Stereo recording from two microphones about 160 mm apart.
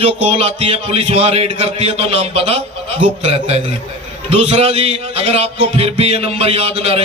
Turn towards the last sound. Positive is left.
turn(degrees=-40)  # may be behind; listen again after turning